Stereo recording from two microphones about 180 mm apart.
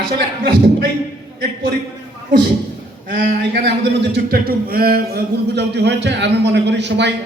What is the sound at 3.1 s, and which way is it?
A man's voice, 60° right (ahead or behind).